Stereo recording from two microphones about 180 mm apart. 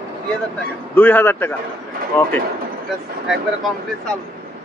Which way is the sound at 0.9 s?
10° left (ahead or behind).